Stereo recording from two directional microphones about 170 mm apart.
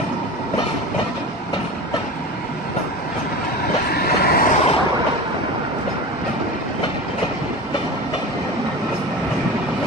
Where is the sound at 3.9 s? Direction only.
60° left (ahead or behind).